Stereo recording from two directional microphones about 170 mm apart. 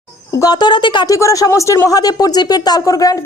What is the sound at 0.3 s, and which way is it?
Speech, 20° left (ahead or behind).